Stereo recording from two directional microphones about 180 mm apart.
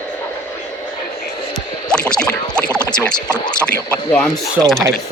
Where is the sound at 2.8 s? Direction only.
25° left (ahead or behind).